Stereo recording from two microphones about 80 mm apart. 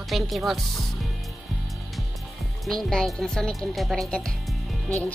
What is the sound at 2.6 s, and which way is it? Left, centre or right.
A woman's voice, centre.